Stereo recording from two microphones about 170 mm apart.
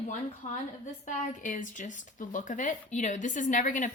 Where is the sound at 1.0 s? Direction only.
50° left (ahead or behind).